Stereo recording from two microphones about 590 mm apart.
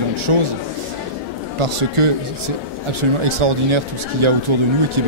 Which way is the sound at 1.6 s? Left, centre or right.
Right.